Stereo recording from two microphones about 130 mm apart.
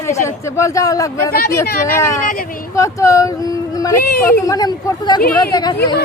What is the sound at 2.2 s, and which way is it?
Speech, 90° left.